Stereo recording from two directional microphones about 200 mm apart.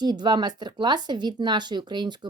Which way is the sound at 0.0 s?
20° right (ahead or behind).